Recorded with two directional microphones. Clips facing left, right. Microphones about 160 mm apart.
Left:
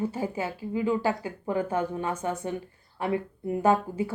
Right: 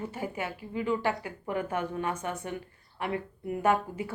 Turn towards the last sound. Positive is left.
turn(degrees=30)  # may be behind; listen again after turning